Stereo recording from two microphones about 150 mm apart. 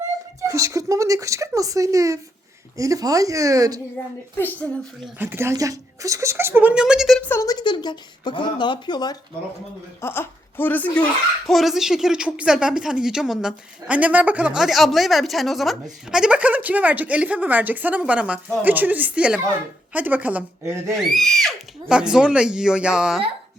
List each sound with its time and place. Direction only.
0.4 s speech: 20° right (ahead or behind)
4.4 s speech: 15° left (ahead or behind)
5.2 s speech: 15° right (ahead or behind)
7.2 s speech: 15° left (ahead or behind)
10.0 s speech: 15° left (ahead or behind)
11.4 s speech: centre (ahead or behind)
20.9 s speech: centre (ahead or behind)